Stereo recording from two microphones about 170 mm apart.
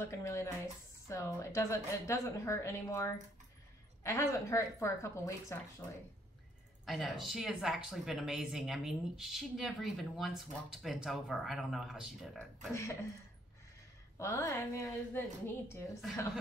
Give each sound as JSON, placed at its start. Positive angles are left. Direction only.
{"t": 0.0, "sound": "a woman's voice", "side_deg": 15}
{"t": 6.9, "sound": "speech", "side_deg": 0}
{"t": 14.1, "sound": "a woman's voice", "side_deg": 15}